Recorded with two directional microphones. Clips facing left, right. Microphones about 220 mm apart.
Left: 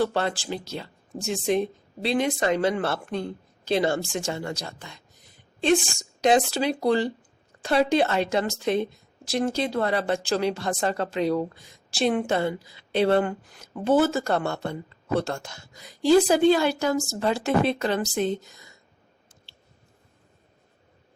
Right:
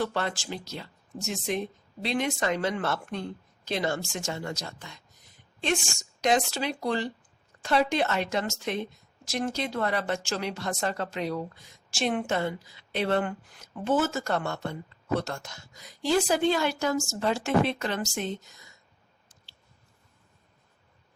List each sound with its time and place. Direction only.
0.0 s speech: 30° left (ahead or behind)
19.5 s chewing: 25° left (ahead or behind)